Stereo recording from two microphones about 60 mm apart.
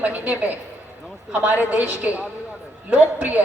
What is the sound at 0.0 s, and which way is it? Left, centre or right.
A woman's voice, right.